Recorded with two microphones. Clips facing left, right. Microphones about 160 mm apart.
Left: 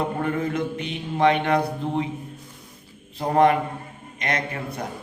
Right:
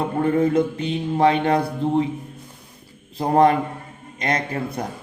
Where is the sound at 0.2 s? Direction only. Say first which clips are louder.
Right 7 dB; 30° right (ahead or behind).